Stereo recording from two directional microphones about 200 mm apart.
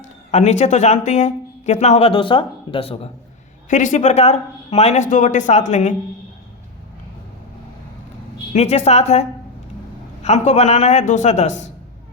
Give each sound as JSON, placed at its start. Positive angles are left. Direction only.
{"t": 0.0, "sound": "speech", "side_deg": 35}
{"t": 3.7, "sound": "speech", "side_deg": 40}
{"t": 8.5, "sound": "speech", "side_deg": 35}
{"t": 10.2, "sound": "speech", "side_deg": 35}